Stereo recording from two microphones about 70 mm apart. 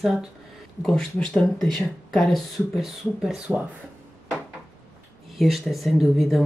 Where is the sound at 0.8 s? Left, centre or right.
Centre.